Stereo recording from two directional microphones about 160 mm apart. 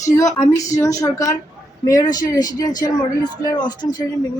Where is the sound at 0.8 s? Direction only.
20° left (ahead or behind).